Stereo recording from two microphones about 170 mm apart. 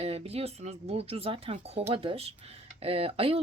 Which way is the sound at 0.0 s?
35° right (ahead or behind).